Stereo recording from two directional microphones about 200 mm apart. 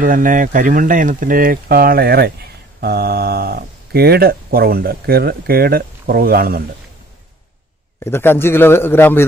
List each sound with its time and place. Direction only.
0.0 s speech: 45° right (ahead or behind)
8.0 s a man's voice: 10° left (ahead or behind)